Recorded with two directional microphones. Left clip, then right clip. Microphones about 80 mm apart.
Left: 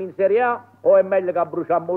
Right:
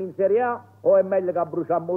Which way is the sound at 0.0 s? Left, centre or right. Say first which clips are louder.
Left 3 dB; left.